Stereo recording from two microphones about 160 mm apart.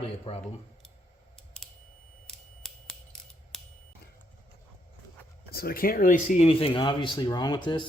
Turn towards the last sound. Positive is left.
turn(degrees=25)  # may be behind; listen again after turning